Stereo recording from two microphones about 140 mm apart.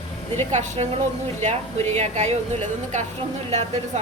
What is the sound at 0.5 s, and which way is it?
A woman's voice, 60° right (ahead or behind).